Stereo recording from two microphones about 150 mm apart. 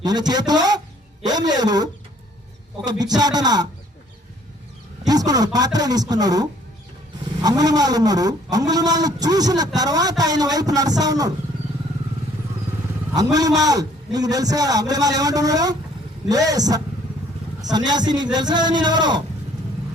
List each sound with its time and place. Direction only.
0.0 s a man's voice: 25° right (ahead or behind)
3.0 s speech: 25° right (ahead or behind)
5.0 s speech: 25° right (ahead or behind)
13.1 s speech: 25° right (ahead or behind)